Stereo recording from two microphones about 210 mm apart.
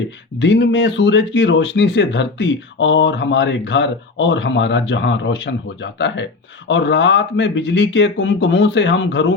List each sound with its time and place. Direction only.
0.3 s speech: 60° left (ahead or behind)